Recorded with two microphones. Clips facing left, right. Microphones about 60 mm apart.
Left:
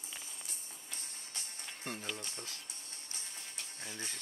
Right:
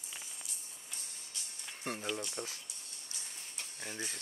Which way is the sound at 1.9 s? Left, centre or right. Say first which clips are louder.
Right 4 dB; centre.